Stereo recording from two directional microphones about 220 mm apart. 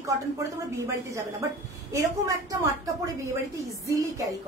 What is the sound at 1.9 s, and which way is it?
Speech, 15° right (ahead or behind).